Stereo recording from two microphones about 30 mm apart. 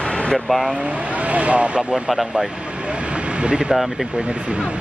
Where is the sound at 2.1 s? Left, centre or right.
Centre.